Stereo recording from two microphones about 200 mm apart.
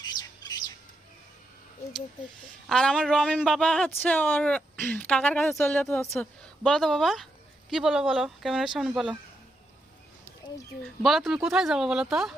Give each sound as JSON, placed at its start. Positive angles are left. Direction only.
{"t": 0.0, "sound": "bird", "side_deg": 20}
{"t": 2.6, "sound": "speech", "side_deg": 5}
{"t": 10.8, "sound": "speech", "side_deg": 0}